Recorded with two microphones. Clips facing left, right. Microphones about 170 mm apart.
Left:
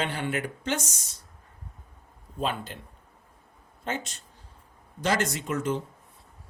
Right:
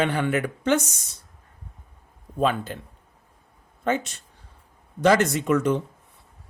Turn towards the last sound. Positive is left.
turn(degrees=-65)  # may be behind; listen again after turning